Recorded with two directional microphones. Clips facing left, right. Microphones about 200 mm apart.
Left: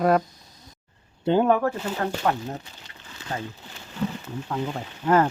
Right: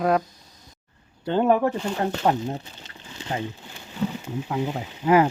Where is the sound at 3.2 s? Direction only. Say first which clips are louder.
Right 3 dB; 20° right (ahead or behind).